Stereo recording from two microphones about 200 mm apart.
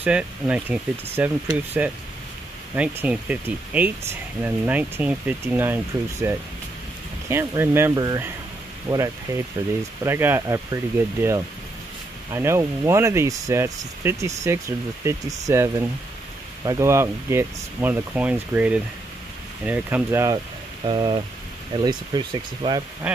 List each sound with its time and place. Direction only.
0.0 s speech: 5° right (ahead or behind)
20.8 s speech: 25° right (ahead or behind)